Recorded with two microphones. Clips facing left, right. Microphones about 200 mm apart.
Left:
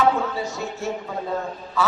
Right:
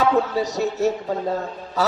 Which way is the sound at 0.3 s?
40° right (ahead or behind).